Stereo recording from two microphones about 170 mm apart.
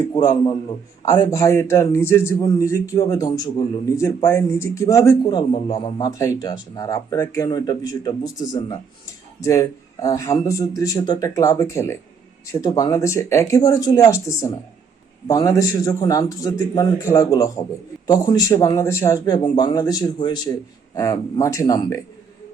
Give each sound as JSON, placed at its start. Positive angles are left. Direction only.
{"t": 0.1, "sound": "a man's voice", "side_deg": 25}